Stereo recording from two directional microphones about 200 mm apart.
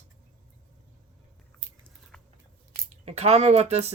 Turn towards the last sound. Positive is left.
turn(degrees=-30)  # may be behind; listen again after turning